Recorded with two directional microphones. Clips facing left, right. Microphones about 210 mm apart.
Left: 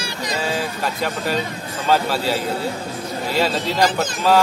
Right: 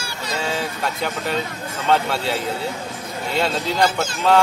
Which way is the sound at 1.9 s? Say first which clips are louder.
Left 1 dB; 5° left (ahead or behind).